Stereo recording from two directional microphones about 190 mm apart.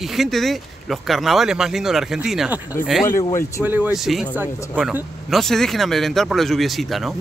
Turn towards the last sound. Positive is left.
turn(degrees=0)  # may be behind; listen again after turning